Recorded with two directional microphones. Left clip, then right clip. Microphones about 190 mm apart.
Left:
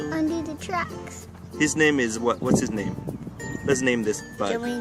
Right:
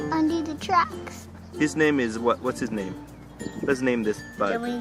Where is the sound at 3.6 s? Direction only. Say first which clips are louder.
Left 1 dB; 15° left (ahead or behind).